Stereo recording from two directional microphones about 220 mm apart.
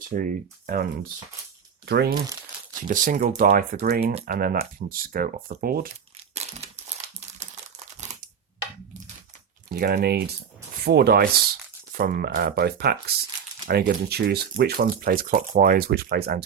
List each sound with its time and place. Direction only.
0.1 s speech: 40° right (ahead or behind)
1.9 s speech: 45° right (ahead or behind)
6.3 s crumpling: 30° right (ahead or behind)
9.7 s speech: 45° right (ahead or behind)